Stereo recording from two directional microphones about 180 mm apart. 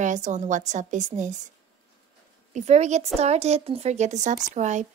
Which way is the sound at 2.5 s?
40° right (ahead or behind).